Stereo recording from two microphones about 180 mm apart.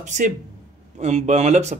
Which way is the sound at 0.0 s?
40° right (ahead or behind).